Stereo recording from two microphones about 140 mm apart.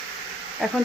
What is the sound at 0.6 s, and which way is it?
Speech, centre (ahead or behind).